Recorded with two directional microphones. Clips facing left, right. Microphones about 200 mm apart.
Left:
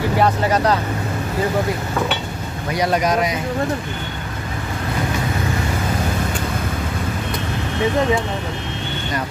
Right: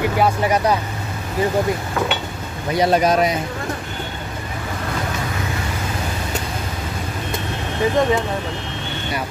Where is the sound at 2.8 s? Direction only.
30° right (ahead or behind).